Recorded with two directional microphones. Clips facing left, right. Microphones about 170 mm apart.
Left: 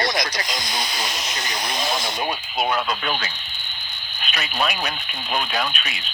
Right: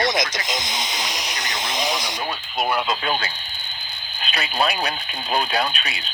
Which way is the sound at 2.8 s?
25° right (ahead or behind).